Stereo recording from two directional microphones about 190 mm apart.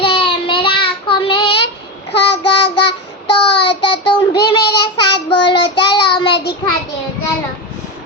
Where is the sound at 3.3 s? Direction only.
25° left (ahead or behind).